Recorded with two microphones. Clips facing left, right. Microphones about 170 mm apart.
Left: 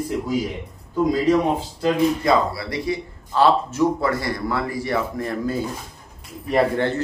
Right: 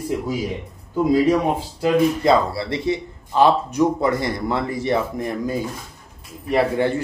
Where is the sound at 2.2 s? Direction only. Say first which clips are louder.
Right 2 dB; 25° right (ahead or behind).